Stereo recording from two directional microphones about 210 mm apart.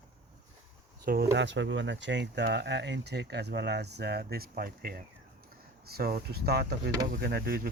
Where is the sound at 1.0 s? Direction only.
45° right (ahead or behind).